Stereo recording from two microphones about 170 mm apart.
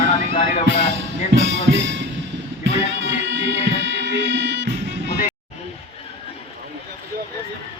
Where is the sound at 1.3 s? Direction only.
90° right.